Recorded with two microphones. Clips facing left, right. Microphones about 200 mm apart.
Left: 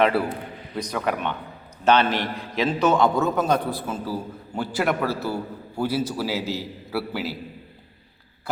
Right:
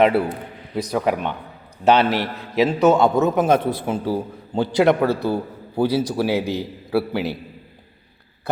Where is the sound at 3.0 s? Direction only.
20° right (ahead or behind).